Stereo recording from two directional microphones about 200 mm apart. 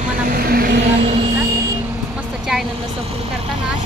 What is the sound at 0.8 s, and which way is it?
Vehicle, 35° right (ahead or behind).